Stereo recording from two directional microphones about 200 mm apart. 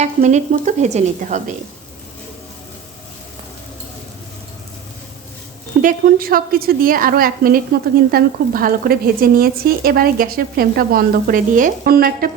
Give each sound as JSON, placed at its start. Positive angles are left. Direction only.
{"t": 0.0, "sound": "speech", "side_deg": -35}
{"t": 5.8, "sound": "speech", "side_deg": -45}